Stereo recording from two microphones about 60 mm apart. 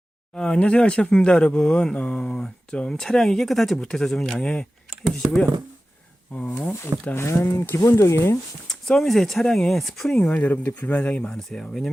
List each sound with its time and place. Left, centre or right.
0.3 s speech: centre
6.3 s speech: left
7.2 s speech: left
8.6 s speech: centre
10.3 s speech: left
11.3 s speech: centre